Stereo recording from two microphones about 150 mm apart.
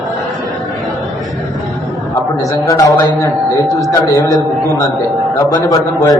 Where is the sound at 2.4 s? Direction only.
25° left (ahead or behind).